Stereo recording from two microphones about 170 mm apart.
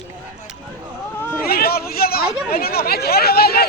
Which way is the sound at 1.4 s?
65° left (ahead or behind).